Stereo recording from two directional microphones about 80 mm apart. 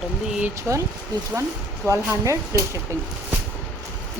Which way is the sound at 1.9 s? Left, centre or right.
Right.